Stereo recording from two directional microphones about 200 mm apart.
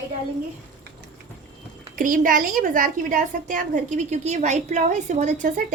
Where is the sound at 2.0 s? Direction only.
40° right (ahead or behind).